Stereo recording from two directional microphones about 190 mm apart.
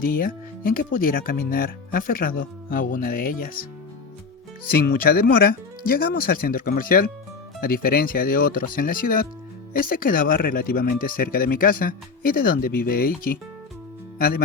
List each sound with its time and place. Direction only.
0.0 s speech: 50° left (ahead or behind)